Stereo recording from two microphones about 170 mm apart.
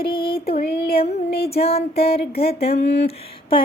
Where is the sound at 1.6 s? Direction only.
35° left (ahead or behind).